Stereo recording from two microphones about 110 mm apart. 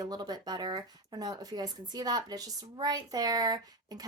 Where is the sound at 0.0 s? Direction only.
35° right (ahead or behind).